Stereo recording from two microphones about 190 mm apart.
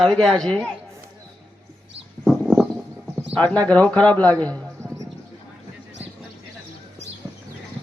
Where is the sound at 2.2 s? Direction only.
Centre (ahead or behind).